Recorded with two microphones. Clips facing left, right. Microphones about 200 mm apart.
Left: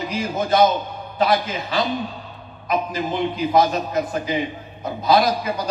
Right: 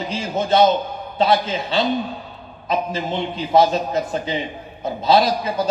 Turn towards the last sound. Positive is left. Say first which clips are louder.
# right 2 dB
turn(degrees=-25)  # may be behind; listen again after turning